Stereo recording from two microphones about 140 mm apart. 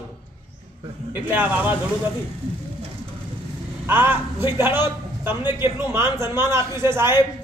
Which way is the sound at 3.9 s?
15° right (ahead or behind).